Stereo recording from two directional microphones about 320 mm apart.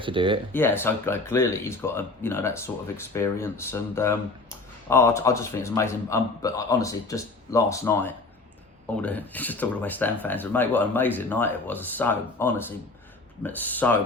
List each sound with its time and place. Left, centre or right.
0.0 s speech: centre
0.5 s speech: centre